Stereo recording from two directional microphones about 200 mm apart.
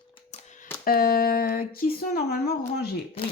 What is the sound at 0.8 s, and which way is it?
Speech, 45° left (ahead or behind).